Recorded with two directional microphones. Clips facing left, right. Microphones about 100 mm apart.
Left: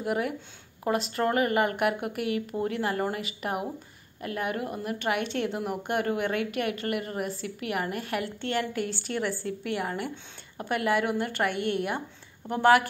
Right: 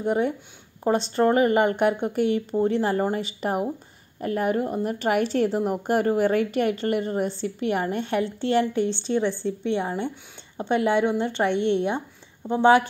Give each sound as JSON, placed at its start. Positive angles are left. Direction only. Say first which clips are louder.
{"t": 0.0, "sound": "speech", "louder": "right 5 dB", "side_deg": -30}